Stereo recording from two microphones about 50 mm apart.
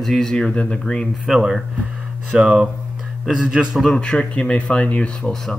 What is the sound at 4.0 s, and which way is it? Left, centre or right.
Speech, left.